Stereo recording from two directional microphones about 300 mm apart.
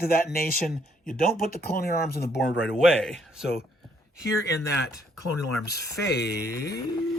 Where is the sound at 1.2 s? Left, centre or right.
Left.